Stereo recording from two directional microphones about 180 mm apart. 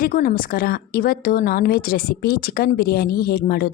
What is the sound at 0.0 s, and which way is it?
A woman's voice, 50° left (ahead or behind).